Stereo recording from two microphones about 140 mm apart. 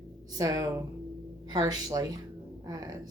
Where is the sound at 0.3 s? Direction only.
25° right (ahead or behind).